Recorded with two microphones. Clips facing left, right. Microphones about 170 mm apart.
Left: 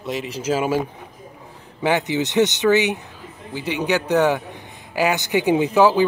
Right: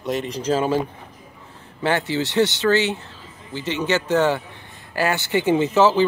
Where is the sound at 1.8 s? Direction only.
15° left (ahead or behind).